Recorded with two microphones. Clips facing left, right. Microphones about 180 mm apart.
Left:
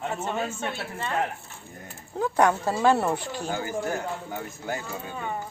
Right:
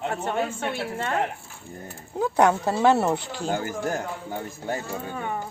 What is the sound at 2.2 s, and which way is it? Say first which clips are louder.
Speech: right 2 dB; 10° right (ahead or behind).